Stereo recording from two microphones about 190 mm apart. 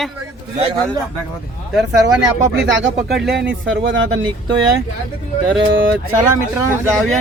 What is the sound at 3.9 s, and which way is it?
Speech, 90° right.